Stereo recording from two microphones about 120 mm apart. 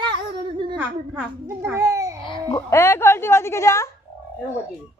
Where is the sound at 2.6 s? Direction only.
20° left (ahead or behind).